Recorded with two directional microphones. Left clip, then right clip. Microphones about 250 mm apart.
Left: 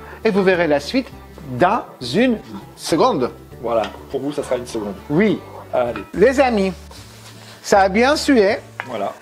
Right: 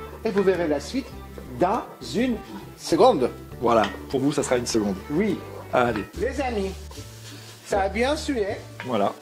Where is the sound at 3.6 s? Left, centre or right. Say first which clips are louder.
Even; right.